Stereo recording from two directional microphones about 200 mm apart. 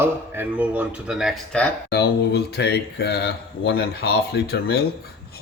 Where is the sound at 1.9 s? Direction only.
55° left (ahead or behind).